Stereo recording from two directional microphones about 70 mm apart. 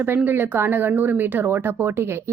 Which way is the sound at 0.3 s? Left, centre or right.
Right.